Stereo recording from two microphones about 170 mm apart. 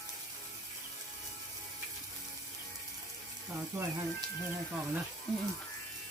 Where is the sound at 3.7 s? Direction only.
15° right (ahead or behind).